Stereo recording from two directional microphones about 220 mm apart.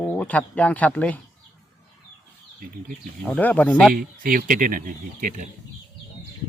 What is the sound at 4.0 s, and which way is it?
Speech, 40° right (ahead or behind).